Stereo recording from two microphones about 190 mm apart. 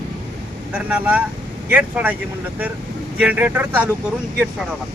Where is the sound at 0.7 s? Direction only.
5° right (ahead or behind).